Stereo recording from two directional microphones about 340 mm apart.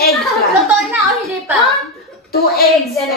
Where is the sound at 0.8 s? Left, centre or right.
Centre.